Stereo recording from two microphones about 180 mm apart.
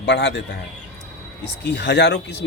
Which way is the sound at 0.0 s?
75° left (ahead or behind).